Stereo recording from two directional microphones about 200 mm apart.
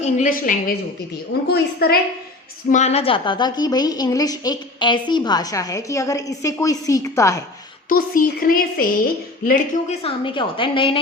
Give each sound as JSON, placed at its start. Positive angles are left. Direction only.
{"t": 0.0, "sound": "speech", "side_deg": 40}
{"t": 2.6, "sound": "a woman's voice", "side_deg": 35}
{"t": 7.9, "sound": "speech", "side_deg": 45}
{"t": 9.5, "sound": "a woman's voice", "side_deg": 35}